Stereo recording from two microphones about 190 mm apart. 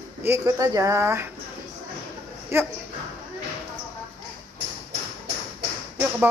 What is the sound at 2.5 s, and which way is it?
Speech, 15° right (ahead or behind).